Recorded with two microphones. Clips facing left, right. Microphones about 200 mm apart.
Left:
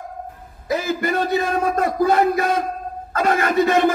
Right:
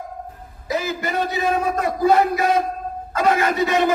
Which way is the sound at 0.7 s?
55° left (ahead or behind).